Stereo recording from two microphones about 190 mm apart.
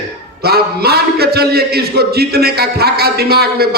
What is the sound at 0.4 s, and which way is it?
A man's voice, 55° right (ahead or behind).